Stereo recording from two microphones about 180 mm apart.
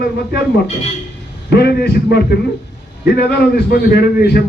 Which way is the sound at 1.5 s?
65° left (ahead or behind).